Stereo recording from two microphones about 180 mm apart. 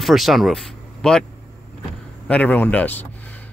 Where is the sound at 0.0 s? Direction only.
Centre (ahead or behind).